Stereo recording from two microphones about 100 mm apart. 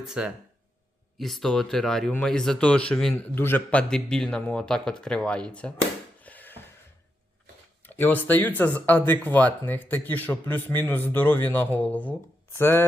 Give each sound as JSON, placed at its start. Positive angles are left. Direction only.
{"t": 0.0, "sound": "speech", "side_deg": -5}
{"t": 3.3, "sound": "speech", "side_deg": 20}
{"t": 6.2, "sound": "a sound", "side_deg": 15}
{"t": 7.9, "sound": "speech", "side_deg": 20}